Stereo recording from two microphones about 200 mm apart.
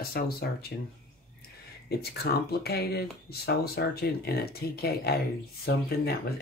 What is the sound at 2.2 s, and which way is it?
Speech, 50° left (ahead or behind).